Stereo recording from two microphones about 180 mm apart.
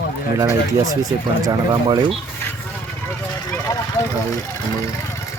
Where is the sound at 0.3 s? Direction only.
20° right (ahead or behind).